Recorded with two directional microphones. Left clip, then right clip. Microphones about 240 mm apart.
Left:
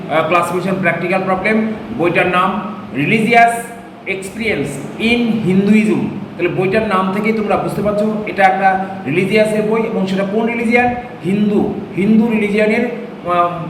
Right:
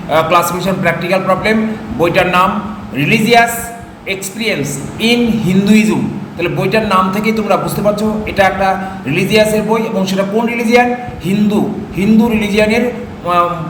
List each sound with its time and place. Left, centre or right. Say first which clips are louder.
0.1 s a man's voice: right 3 dB; centre
11.9 s a man's voice: right 2 dB; centre